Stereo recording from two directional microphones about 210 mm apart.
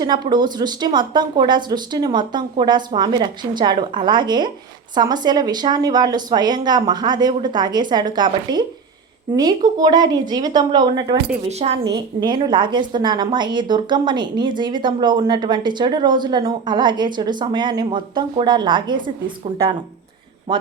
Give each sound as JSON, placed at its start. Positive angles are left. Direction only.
{"t": 0.0, "sound": "a woman's voice", "side_deg": -20}
{"t": 11.4, "sound": "a woman's voice", "side_deg": -30}
{"t": 20.5, "sound": "speech", "side_deg": -25}